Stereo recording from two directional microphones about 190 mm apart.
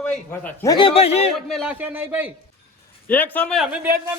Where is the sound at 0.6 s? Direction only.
25° left (ahead or behind).